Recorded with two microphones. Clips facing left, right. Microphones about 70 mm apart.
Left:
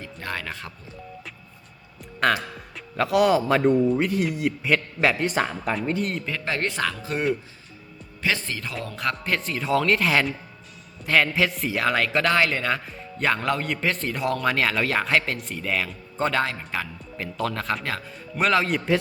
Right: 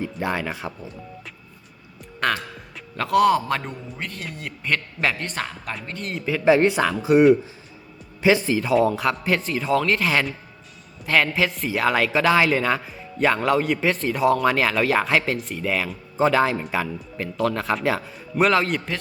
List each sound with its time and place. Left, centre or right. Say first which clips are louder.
0.0 s speech: right 7 dB; centre
2.2 s speech: left 2 dB; centre